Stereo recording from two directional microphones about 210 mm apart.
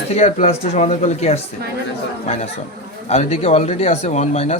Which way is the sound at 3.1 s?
30° left (ahead or behind).